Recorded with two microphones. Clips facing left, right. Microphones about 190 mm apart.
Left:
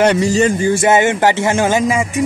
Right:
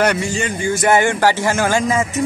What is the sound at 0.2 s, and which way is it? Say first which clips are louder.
Music: left 8 dB; 40° left (ahead or behind).